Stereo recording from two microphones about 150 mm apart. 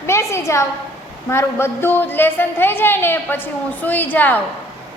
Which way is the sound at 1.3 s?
15° left (ahead or behind).